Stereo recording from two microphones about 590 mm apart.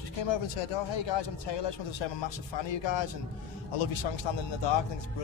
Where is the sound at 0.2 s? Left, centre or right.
Left.